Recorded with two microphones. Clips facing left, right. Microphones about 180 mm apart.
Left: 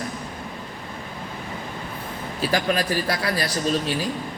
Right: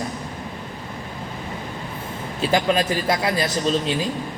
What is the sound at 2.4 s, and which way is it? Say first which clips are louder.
A man's voice: right 3 dB; 20° right (ahead or behind).